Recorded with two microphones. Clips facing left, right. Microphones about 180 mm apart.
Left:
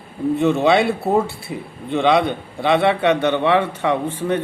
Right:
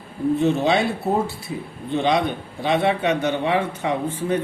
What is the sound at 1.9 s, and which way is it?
A man's voice, 65° left (ahead or behind).